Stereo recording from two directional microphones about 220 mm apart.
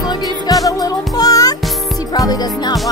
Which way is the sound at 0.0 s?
20° left (ahead or behind).